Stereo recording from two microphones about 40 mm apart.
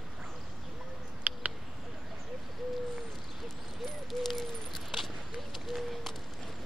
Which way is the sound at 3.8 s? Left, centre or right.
Centre.